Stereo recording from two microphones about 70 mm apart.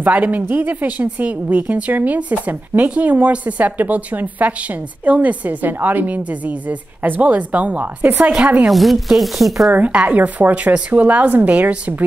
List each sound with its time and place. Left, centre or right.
0.0 s a woman's voice: right
8.6 s speech: centre
9.7 s a woman's voice: right